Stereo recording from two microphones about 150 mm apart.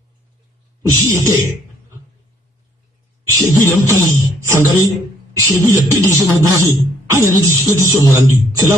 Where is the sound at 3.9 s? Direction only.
20° right (ahead or behind).